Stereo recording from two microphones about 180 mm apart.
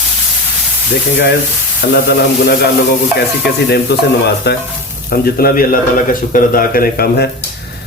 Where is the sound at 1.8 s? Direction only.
60° left (ahead or behind).